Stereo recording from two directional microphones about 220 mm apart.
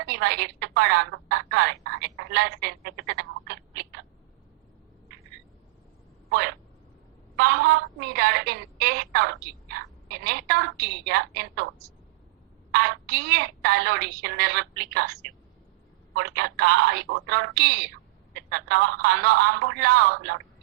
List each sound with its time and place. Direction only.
0.0 s a woman's voice: 50° right (ahead or behind)
6.3 s a woman's voice: 50° right (ahead or behind)
12.7 s a woman's voice: 50° right (ahead or behind)